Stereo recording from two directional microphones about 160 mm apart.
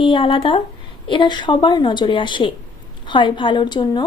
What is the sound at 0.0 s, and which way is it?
Speech, 30° left (ahead or behind).